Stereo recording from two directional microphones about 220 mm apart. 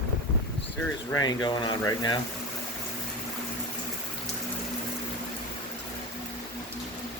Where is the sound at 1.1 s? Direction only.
20° left (ahead or behind).